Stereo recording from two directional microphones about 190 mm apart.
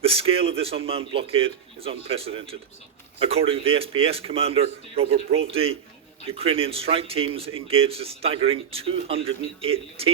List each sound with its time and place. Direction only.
0.0 s a man's voice: 30° right (ahead or behind)